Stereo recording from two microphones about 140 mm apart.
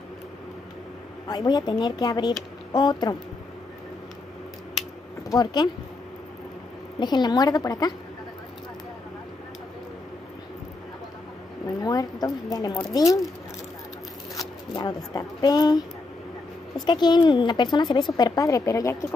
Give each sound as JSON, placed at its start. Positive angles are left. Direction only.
{"t": 1.2, "sound": "a woman's voice", "side_deg": 30}
{"t": 5.3, "sound": "speech", "side_deg": 30}
{"t": 7.0, "sound": "a woman's voice", "side_deg": 30}
{"t": 11.8, "sound": "a woman's voice", "side_deg": 25}
{"t": 14.7, "sound": "a woman's voice", "side_deg": 30}